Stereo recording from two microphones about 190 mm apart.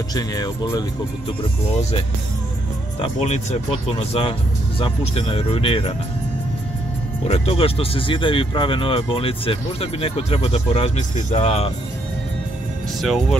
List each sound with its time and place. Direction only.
0.1 s speech: 20° left (ahead or behind)
1.4 s speech: 35° left (ahead or behind)
3.0 s speech: 35° left (ahead or behind)
7.2 s speech: 30° left (ahead or behind)
13.0 s speech: centre (ahead or behind)